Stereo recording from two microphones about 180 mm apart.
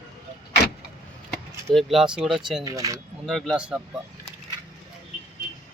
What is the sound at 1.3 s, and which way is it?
Speech, 5° left (ahead or behind).